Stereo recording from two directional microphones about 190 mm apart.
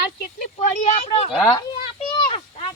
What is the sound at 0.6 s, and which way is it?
Speech, 35° left (ahead or behind).